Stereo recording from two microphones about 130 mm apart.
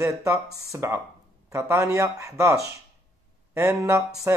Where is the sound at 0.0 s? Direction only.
20° right (ahead or behind).